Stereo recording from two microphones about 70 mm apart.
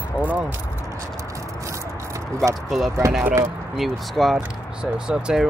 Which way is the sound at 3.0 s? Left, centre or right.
Right.